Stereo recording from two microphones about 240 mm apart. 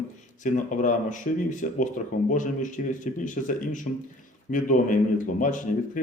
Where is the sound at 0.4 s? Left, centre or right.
Left.